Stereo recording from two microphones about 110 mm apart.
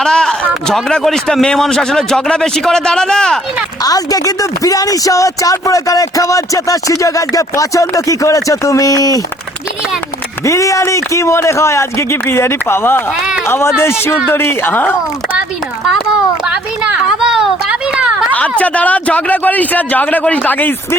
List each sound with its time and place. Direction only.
0.0 s a man's voice: 5° left (ahead or behind)
3.8 s speech: 35° left (ahead or behind)
10.4 s speech: 30° left (ahead or behind)
16.5 s speech: 5° right (ahead or behind)
18.3 s a man's voice: 15° left (ahead or behind)